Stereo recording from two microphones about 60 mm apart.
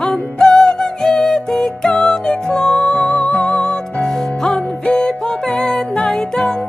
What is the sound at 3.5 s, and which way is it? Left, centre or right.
Music, centre.